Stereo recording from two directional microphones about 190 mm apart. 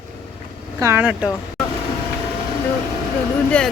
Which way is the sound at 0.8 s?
15° right (ahead or behind).